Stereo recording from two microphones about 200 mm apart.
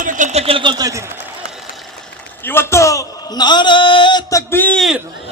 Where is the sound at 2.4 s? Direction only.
10° left (ahead or behind).